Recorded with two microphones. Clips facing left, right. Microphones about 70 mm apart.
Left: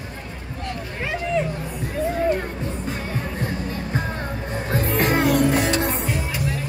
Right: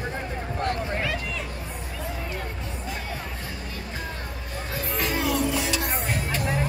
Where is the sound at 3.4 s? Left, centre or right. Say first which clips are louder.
Left 8 dB; left.